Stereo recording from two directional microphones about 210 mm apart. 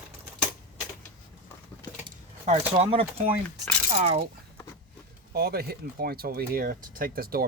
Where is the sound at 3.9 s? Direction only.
30° right (ahead or behind).